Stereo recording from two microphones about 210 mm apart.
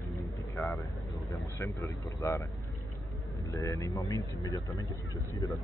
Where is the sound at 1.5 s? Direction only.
15° left (ahead or behind).